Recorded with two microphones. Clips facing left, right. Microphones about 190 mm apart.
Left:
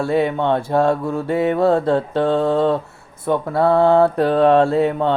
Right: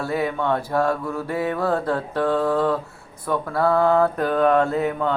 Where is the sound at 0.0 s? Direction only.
25° left (ahead or behind).